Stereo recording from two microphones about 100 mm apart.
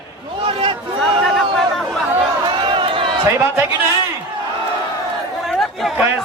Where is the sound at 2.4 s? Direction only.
55° right (ahead or behind).